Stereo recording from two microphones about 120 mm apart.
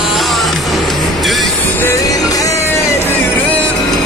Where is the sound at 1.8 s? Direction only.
25° left (ahead or behind).